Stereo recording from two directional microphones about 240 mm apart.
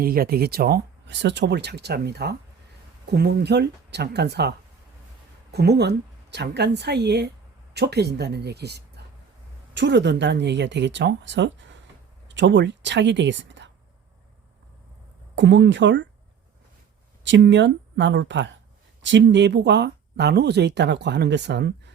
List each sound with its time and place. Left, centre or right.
0.0 s speech: right
15.4 s speech: right
17.2 s speech: right